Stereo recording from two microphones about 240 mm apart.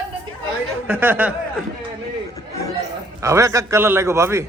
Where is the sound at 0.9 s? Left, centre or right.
Centre.